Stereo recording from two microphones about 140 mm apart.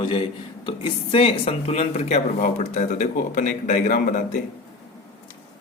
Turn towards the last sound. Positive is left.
turn(degrees=70)  # may be behind; listen again after turning